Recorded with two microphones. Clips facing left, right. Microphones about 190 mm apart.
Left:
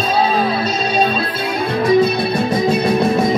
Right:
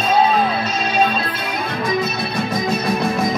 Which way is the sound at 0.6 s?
35° left (ahead or behind).